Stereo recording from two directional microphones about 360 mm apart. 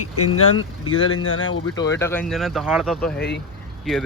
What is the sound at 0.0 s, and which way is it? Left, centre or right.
Speech, left.